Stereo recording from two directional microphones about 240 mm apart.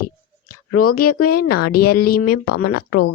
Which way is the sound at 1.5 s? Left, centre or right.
Left.